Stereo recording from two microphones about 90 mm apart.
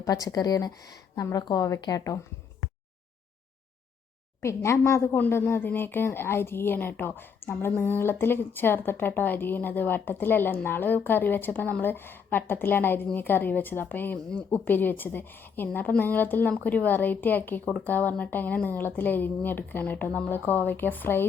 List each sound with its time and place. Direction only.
0.0 s a woman's voice: 40° left (ahead or behind)
4.4 s speech: 35° left (ahead or behind)